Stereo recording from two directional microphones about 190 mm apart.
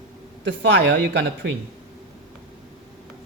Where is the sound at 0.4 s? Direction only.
65° right (ahead or behind).